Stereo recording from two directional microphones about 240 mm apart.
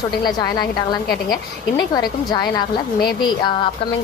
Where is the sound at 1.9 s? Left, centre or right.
Centre.